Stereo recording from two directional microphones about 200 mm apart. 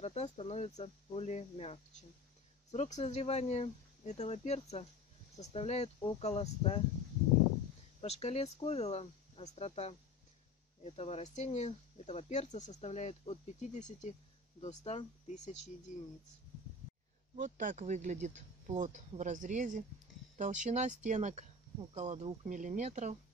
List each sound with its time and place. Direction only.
0.0 s speech: 35° left (ahead or behind)
8.0 s speech: 30° left (ahead or behind)
17.4 s speech: 40° right (ahead or behind)